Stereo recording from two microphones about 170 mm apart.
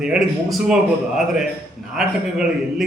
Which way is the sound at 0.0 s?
5° right (ahead or behind).